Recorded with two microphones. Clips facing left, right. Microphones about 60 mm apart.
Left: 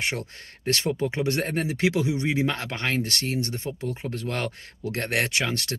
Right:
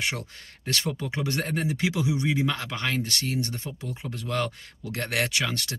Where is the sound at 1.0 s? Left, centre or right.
Left.